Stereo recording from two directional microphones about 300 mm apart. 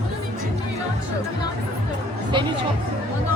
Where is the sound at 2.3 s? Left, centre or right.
Centre.